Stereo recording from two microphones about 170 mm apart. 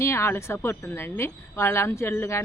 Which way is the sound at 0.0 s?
15° left (ahead or behind).